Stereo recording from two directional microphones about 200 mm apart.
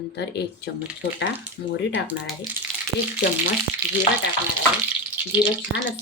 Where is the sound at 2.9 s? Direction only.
10° right (ahead or behind).